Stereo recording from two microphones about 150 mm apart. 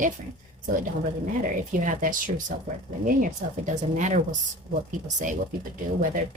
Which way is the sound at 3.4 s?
55° right (ahead or behind).